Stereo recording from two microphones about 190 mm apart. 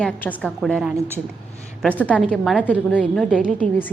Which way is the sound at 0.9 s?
15° right (ahead or behind).